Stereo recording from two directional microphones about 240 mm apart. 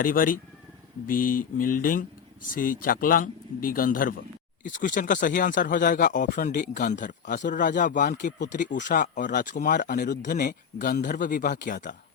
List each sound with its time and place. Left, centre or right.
0.0 s speech: left